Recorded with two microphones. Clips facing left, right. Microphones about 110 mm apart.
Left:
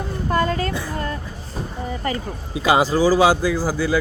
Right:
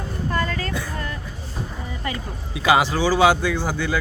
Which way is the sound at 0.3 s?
35° left (ahead or behind).